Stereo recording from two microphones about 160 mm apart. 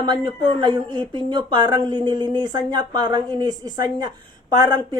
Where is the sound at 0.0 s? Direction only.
25° right (ahead or behind).